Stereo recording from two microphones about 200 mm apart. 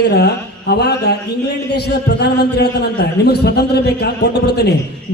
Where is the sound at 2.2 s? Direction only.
55° left (ahead or behind).